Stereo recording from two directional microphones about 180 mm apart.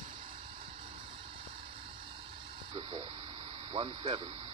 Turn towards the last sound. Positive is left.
turn(degrees=-30)  # may be behind; listen again after turning